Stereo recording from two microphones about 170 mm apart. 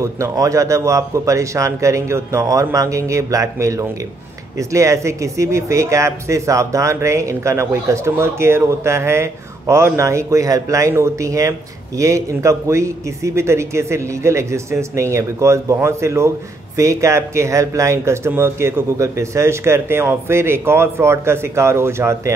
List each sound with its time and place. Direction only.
0.0 s a man's voice: 20° right (ahead or behind)